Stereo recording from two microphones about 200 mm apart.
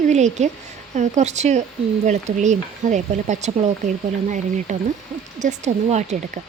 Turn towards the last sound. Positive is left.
turn(degrees=-35)  # may be behind; listen again after turning